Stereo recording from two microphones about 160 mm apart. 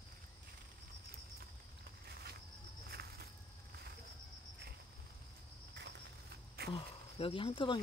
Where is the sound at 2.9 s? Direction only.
80° right.